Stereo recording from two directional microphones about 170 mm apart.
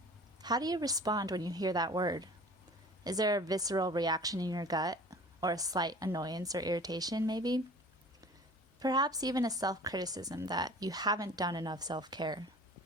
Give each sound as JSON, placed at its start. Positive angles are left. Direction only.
{"t": 0.4, "sound": "a woman's voice", "side_deg": -25}
{"t": 8.8, "sound": "a woman's voice", "side_deg": -25}